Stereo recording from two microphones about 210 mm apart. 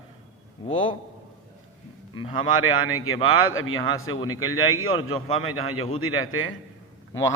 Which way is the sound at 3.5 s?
75° left (ahead or behind).